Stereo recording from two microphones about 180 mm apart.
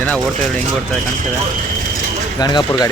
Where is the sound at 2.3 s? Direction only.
20° left (ahead or behind).